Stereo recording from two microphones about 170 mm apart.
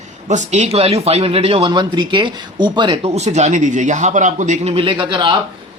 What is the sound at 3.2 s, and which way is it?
Speech, 40° right (ahead or behind).